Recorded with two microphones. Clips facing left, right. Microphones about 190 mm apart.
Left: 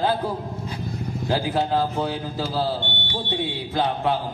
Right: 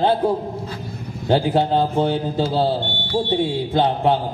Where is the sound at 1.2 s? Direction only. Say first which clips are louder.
Right 6 dB; 30° right (ahead or behind).